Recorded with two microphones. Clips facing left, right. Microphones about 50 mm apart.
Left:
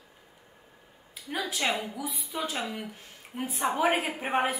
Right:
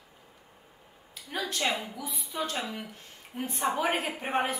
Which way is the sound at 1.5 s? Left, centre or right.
Centre.